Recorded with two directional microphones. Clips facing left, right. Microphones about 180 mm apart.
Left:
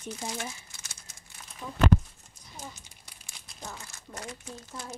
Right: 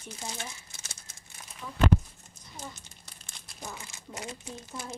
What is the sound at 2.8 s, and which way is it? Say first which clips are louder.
Crumpling: right 1 dB; 10° left (ahead or behind).